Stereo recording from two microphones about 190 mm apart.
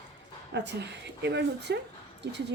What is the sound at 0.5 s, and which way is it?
A woman's voice, 65° right (ahead or behind).